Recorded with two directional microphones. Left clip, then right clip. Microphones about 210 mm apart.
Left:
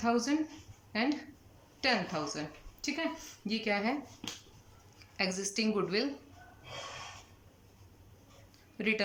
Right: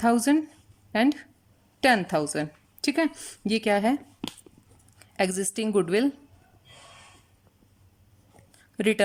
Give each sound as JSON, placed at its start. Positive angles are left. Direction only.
{"t": 0.0, "sound": "speech", "side_deg": -45}
{"t": 4.9, "sound": "a woman's voice", "side_deg": -40}
{"t": 8.5, "sound": "a sound", "side_deg": -40}